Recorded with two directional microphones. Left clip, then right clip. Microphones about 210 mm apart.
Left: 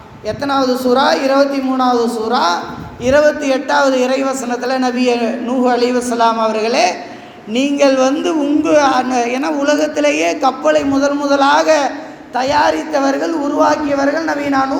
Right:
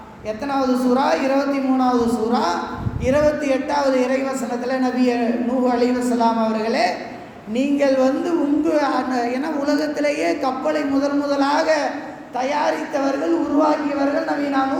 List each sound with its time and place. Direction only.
0.4 s speech: 25° left (ahead or behind)